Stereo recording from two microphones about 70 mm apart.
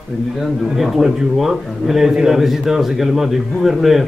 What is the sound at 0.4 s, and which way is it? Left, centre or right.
A man's voice, centre.